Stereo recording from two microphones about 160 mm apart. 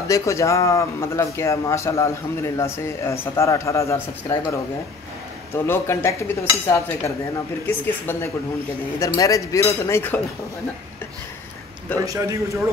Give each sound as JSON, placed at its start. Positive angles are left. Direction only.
{"t": 0.1, "sound": "speech", "side_deg": 20}
{"t": 5.7, "sound": "speech", "side_deg": 15}
{"t": 12.0, "sound": "a man's voice", "side_deg": -20}